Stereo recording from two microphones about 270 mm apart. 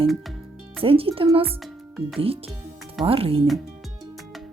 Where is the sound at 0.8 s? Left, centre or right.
Right.